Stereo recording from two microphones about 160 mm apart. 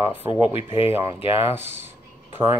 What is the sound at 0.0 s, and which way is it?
Speech, 15° right (ahead or behind).